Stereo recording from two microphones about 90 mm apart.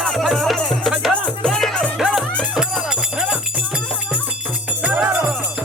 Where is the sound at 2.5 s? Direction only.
5° right (ahead or behind).